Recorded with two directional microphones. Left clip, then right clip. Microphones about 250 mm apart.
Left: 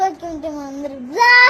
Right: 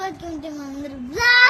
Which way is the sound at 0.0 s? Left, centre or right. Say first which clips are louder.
Left 9 dB; centre.